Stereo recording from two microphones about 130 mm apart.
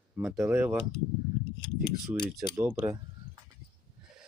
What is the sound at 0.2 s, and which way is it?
Speech, 5° right (ahead or behind).